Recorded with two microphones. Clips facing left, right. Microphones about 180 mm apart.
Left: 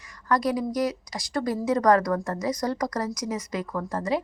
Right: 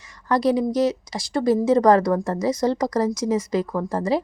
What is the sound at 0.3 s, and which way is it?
Speech, 30° right (ahead or behind).